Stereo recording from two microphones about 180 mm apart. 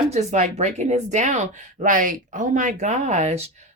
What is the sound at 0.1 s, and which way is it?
Speech, 40° right (ahead or behind).